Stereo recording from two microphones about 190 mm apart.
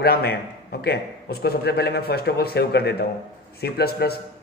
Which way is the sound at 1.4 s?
55° left (ahead or behind).